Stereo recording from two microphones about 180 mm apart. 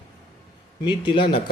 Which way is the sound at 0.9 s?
25° left (ahead or behind).